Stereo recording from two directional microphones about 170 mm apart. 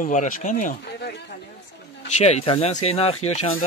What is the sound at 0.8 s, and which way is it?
Chatter, 80° left.